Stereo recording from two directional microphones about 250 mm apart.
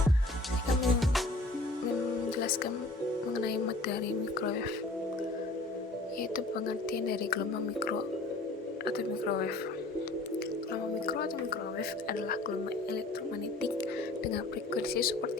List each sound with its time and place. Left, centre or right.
0.8 s music: centre
3.4 s speech: left
6.3 s speech: left
8.8 s speech: left
11.0 s speech: left
14.3 s speech: left